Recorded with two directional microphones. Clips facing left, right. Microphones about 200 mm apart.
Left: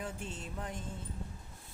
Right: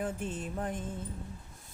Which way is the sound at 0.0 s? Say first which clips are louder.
Right 7 dB; 50° right (ahead or behind).